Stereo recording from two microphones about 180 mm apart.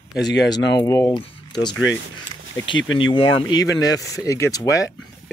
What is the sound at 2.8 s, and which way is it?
Speech, 90° left.